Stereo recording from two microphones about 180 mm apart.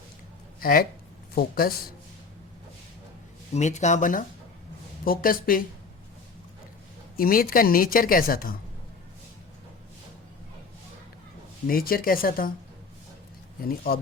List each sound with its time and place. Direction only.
0.6 s a man's voice: 55° left (ahead or behind)
3.5 s speech: 40° left (ahead or behind)
7.2 s speech: 55° left (ahead or behind)
11.7 s speech: 55° left (ahead or behind)
13.7 s a man's voice: 55° left (ahead or behind)